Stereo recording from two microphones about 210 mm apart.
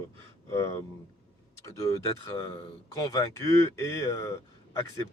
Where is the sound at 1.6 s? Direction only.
15° left (ahead or behind).